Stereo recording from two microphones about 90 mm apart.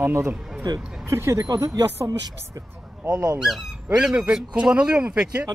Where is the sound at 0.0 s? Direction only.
25° right (ahead or behind).